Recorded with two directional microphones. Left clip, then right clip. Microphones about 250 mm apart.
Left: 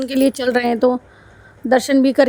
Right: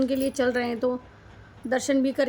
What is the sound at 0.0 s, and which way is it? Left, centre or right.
Speech, left.